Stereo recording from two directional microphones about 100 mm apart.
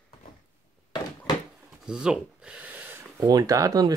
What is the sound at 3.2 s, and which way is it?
Speech, 40° right (ahead or behind).